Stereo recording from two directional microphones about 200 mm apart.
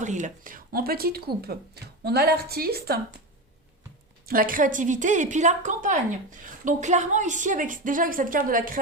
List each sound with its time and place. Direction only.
0.0 s speech: 40° right (ahead or behind)
4.3 s a woman's voice: 45° right (ahead or behind)